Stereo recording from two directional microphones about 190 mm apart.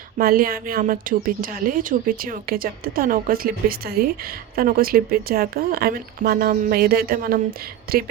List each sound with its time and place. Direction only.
0.2 s a woman's voice: 50° right (ahead or behind)